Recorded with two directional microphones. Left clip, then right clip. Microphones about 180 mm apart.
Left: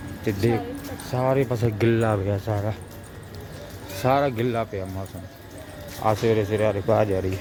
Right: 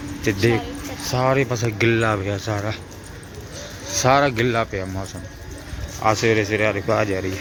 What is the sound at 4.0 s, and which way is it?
Speech, centre (ahead or behind).